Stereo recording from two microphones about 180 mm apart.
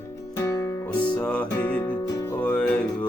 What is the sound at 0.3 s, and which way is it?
Music, 20° left (ahead or behind).